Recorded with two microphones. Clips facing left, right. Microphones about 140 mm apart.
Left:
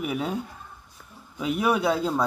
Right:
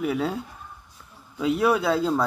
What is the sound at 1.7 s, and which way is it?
Speech, 15° left (ahead or behind).